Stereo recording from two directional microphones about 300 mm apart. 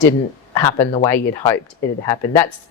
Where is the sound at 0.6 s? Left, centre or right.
Centre.